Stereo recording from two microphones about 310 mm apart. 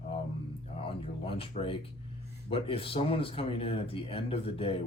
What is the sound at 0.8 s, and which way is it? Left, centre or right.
Speech, centre.